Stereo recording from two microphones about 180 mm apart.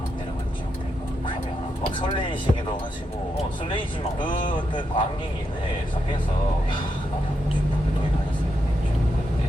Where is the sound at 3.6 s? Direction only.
25° left (ahead or behind).